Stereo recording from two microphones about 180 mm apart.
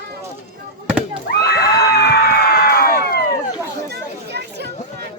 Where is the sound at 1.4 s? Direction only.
60° left (ahead or behind).